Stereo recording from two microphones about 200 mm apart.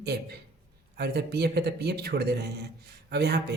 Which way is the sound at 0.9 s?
55° right (ahead or behind).